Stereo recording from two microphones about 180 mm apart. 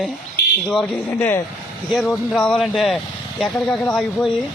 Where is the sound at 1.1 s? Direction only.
15° left (ahead or behind).